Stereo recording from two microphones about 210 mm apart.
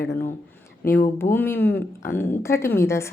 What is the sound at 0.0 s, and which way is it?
Speech, 50° left (ahead or behind).